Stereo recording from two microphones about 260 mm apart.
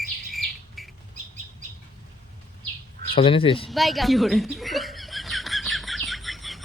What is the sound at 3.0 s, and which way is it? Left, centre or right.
Speech, left.